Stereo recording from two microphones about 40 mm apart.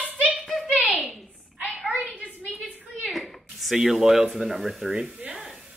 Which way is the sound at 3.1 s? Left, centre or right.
Centre.